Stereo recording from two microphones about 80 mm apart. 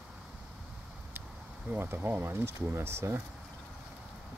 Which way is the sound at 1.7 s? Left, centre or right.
Right.